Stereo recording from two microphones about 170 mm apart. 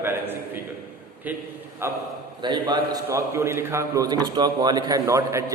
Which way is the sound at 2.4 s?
25° right (ahead or behind).